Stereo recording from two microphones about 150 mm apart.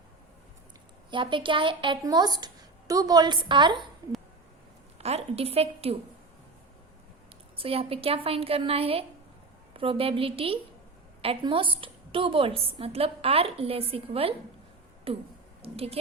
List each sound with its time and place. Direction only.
1.1 s a woman's voice: 35° right (ahead or behind)
4.9 s a woman's voice: 45° right (ahead or behind)
7.5 s a woman's voice: 40° right (ahead or behind)